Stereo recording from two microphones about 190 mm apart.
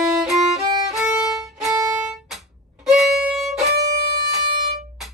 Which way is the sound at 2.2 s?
Centre (ahead or behind).